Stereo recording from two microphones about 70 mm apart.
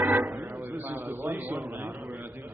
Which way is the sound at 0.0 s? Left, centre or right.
Right.